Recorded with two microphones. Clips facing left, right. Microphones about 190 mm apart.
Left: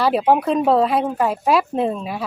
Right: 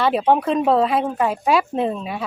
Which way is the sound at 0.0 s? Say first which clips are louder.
Left 1 dB; centre (ahead or behind).